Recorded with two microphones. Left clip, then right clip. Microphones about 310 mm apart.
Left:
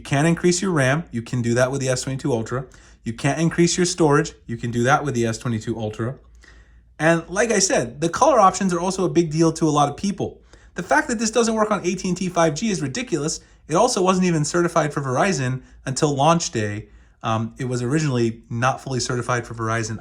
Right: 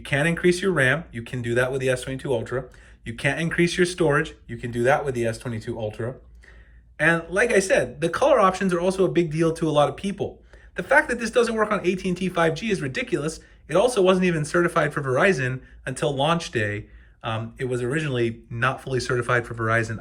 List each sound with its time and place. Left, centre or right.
0.0 s speech: centre
7.0 s speech: centre